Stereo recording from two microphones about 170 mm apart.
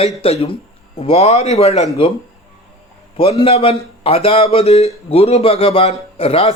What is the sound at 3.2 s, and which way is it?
A man's voice, 35° left (ahead or behind).